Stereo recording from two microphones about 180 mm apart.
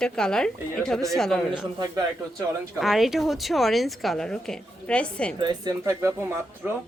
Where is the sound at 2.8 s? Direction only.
Centre (ahead or behind).